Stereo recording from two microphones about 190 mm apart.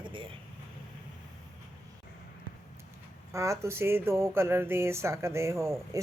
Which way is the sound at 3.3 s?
15° right (ahead or behind).